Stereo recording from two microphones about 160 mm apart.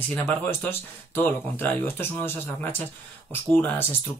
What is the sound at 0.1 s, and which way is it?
Speech, 10° left (ahead or behind).